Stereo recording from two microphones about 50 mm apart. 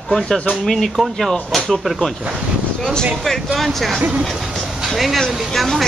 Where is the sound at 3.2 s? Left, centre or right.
Centre.